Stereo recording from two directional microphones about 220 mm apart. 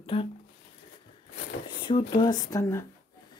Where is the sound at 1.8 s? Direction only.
20° left (ahead or behind).